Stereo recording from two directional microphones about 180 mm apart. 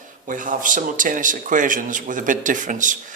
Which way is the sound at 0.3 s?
45° right (ahead or behind).